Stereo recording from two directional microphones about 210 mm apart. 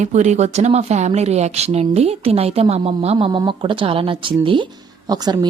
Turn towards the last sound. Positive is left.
turn(degrees=-20)  # may be behind; listen again after turning